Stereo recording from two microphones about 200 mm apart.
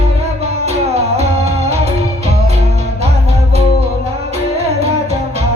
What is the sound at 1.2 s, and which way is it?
Music, 30° right (ahead or behind).